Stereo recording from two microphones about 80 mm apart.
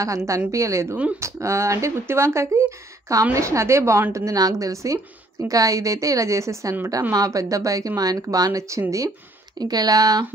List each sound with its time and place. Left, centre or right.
0.0 s a woman's voice: right
9.6 s a woman's voice: right